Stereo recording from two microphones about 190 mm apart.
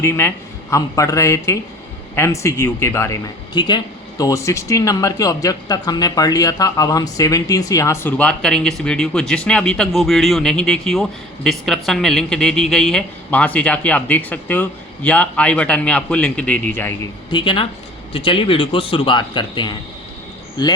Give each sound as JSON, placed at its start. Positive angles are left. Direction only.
{"t": 0.0, "sound": "speech", "side_deg": 10}
{"t": 17.3, "sound": "a man's voice", "side_deg": 25}